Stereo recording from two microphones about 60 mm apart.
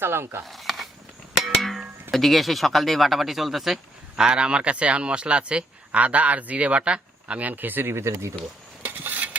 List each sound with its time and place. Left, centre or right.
0.0 s speech: right
0.4 s a sound: centre
1.4 s music: centre
2.0 s speech: centre
4.2 s speech: centre; by 8.3 s right
8.8 s mechanisms: right